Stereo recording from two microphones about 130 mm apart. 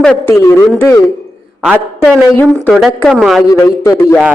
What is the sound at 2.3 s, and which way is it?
Speech, 15° left (ahead or behind).